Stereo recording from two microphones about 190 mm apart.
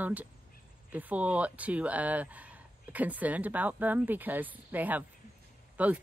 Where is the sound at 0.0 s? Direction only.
10° right (ahead or behind).